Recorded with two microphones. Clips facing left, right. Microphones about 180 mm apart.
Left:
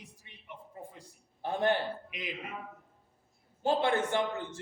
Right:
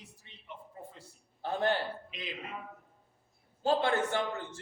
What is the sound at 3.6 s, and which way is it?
A man's voice, 20° left (ahead or behind).